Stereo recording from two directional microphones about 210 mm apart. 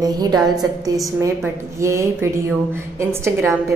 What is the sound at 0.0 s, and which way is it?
A woman's voice, 20° right (ahead or behind).